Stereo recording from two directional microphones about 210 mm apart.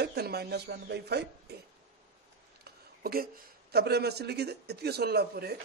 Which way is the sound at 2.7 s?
45° right (ahead or behind).